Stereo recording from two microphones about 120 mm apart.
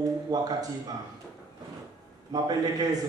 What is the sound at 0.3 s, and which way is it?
Speech, 30° right (ahead or behind).